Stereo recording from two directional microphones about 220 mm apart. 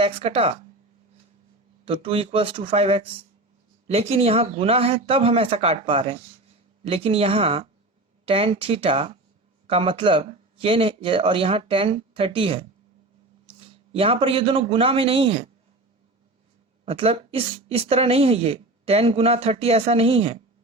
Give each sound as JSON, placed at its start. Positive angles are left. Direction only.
{"t": 0.0, "sound": "speech", "side_deg": -25}
{"t": 1.8, "sound": "a man's voice", "side_deg": -25}
{"t": 16.8, "sound": "speech", "side_deg": -25}